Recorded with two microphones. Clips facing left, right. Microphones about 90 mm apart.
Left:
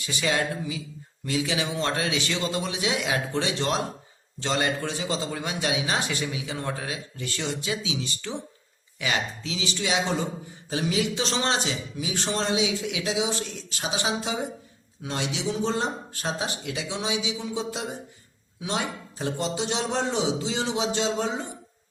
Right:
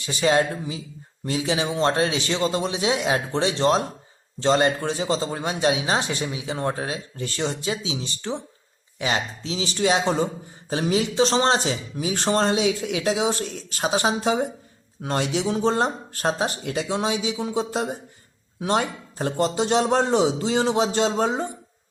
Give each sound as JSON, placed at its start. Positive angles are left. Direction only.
{"t": 0.0, "sound": "speech", "side_deg": -35}